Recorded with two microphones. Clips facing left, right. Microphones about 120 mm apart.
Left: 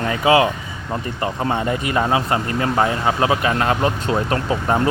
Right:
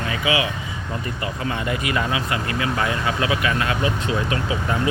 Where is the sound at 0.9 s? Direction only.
35° left (ahead or behind).